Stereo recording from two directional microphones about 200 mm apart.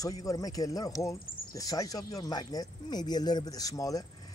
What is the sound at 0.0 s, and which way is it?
Speech, 15° left (ahead or behind).